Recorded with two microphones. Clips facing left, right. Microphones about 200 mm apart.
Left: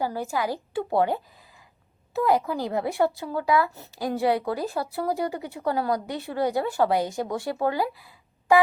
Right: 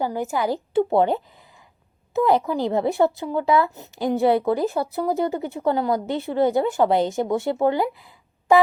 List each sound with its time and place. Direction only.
0.0 s speech: 20° right (ahead or behind)